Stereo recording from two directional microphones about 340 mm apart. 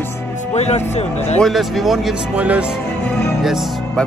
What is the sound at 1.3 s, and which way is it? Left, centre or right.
Speech, centre.